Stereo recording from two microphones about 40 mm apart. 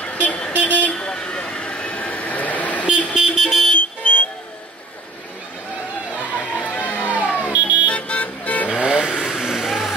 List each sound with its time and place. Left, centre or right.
0.0 s vehicle: left
0.9 s vehicle: left
3.2 s vehicle: centre
3.4 s vehicle: centre
3.7 s vehicle: left
6.6 s music: left
7.4 s vehicle: right
7.8 s vehicle: left
8.7 s vehicle: right
9.1 s music: centre